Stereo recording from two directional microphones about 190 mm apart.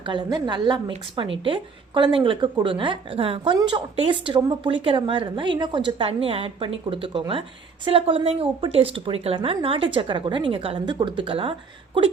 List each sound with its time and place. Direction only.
0.0 s a woman's voice: 25° right (ahead or behind)